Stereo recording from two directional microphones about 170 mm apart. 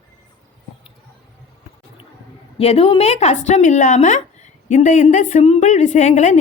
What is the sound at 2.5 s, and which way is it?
A woman's voice, 35° left (ahead or behind).